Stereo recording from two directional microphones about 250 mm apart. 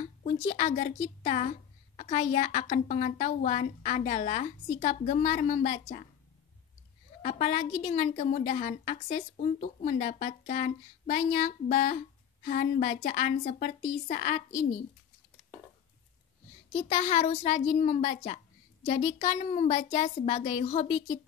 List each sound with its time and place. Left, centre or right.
0.0 s speech: left
7.2 s a woman's voice: left
16.7 s speech: left